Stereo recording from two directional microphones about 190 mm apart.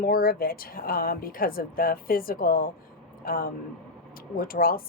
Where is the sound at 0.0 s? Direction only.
50° left (ahead or behind).